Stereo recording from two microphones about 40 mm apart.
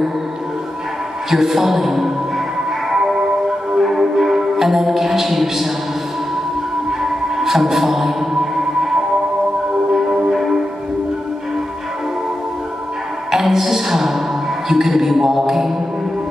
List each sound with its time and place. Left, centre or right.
1.3 s a man's voice: centre
2.9 s music: centre
6.9 s music: centre
9.9 s music: centre
13.3 s music: centre